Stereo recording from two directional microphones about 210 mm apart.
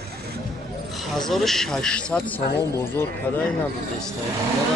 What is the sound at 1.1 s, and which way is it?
Speech, centre (ahead or behind).